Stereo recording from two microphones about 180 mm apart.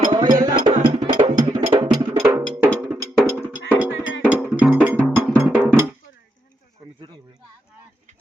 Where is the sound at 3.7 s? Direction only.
10° right (ahead or behind).